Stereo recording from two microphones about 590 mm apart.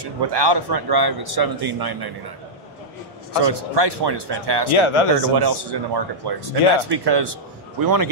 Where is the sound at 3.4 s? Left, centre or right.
Right.